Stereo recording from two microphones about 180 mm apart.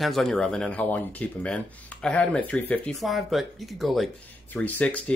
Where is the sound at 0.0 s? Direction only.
Centre (ahead or behind).